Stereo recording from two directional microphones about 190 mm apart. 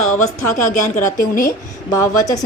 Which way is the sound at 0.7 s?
45° left (ahead or behind).